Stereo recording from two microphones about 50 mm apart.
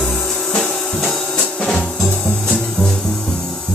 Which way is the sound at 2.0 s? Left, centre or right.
Centre.